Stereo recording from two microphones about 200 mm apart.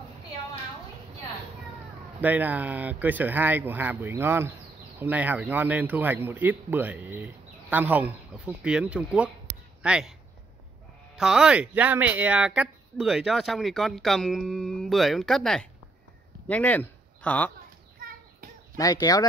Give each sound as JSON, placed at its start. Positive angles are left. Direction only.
{"t": 2.2, "sound": "speech", "side_deg": -10}
{"t": 11.1, "sound": "speech", "side_deg": -5}
{"t": 18.8, "sound": "speech", "side_deg": 20}